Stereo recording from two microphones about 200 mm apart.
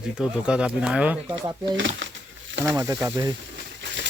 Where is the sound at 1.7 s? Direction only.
65° right (ahead or behind).